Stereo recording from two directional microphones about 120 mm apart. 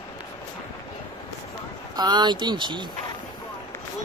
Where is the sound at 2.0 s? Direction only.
35° right (ahead or behind).